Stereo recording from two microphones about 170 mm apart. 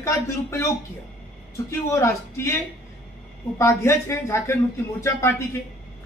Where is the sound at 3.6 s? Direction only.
15° left (ahead or behind).